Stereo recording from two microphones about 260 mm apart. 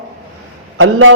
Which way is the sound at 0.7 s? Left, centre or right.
Right.